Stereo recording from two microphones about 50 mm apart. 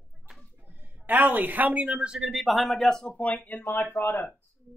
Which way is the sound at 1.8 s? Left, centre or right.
Centre.